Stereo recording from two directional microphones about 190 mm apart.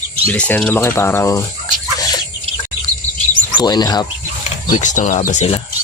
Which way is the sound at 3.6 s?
20° left (ahead or behind).